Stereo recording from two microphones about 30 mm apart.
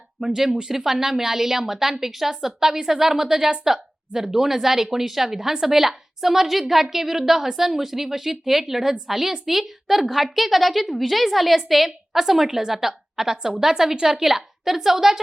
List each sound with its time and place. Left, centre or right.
0.2 s a woman's voice: centre
14.3 s a woman's voice: centre